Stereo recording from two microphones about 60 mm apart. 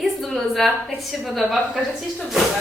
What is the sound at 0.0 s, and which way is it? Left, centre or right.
A woman's voice, centre.